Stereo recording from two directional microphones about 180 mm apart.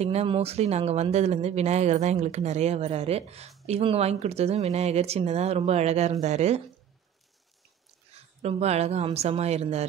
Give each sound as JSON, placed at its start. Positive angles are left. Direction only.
{"t": 0.0, "sound": "speech", "side_deg": -35}
{"t": 8.1, "sound": "a woman's voice", "side_deg": -35}